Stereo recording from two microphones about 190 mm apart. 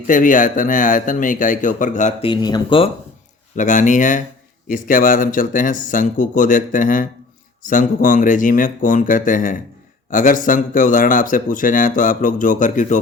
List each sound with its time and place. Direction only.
0.1 s a man's voice: 45° left (ahead or behind)
2.3 s speech: 25° left (ahead or behind)
3.5 s a man's voice: 40° left (ahead or behind)